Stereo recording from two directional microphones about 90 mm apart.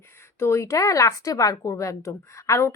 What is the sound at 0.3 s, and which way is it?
Speech, 30° left (ahead or behind).